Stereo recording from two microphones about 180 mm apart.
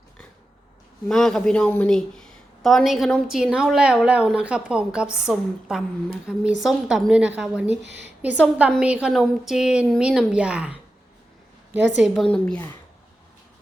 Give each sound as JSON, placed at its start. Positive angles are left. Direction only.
{"t": 1.0, "sound": "speech", "side_deg": 0}
{"t": 7.9, "sound": "a woman's voice", "side_deg": -75}
{"t": 8.2, "sound": "a woman's voice", "side_deg": -10}
{"t": 12.0, "sound": "speech", "side_deg": 0}